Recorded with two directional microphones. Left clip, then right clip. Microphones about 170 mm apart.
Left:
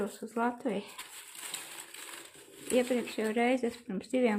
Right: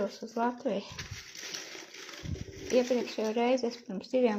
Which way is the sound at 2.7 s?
20° left (ahead or behind).